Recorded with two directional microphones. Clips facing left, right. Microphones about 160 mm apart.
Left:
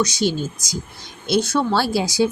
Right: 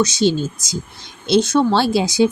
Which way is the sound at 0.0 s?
25° right (ahead or behind).